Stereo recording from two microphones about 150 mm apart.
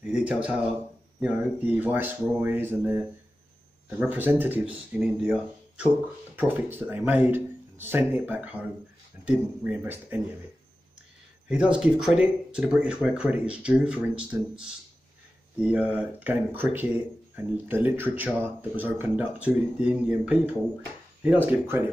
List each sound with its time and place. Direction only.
0.0 s speech: 10° right (ahead or behind)
4.0 s speech: 10° right (ahead or behind)
11.4 s speech: 5° right (ahead or behind)